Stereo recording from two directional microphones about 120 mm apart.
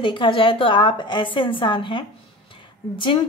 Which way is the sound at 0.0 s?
45° left (ahead or behind).